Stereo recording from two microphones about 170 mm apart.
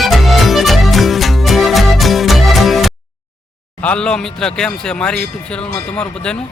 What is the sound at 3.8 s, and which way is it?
Speech, 5° left (ahead or behind).